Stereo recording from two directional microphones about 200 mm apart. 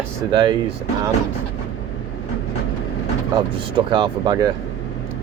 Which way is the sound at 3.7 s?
25° right (ahead or behind).